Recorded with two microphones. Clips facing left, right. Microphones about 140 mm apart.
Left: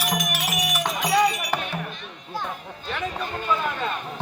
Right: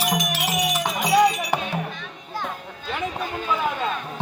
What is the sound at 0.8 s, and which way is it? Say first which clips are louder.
Music: right 2 dB; 10° right (ahead or behind).